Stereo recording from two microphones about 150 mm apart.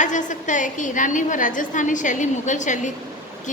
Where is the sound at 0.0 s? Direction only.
55° left (ahead or behind).